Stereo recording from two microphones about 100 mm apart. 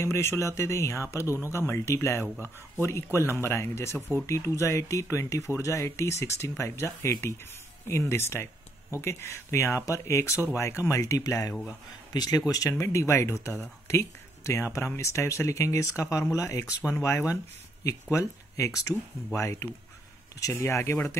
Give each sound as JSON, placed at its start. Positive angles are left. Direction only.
{"t": 0.0, "sound": "speech", "side_deg": 25}